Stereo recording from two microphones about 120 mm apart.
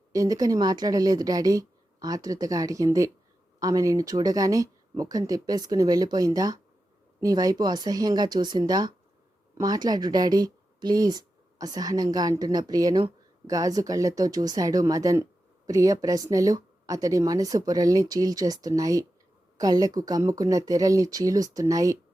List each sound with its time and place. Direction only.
0.1 s speech: 30° right (ahead or behind)